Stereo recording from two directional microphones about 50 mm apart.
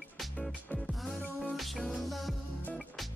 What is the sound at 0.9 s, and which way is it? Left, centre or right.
Music, centre.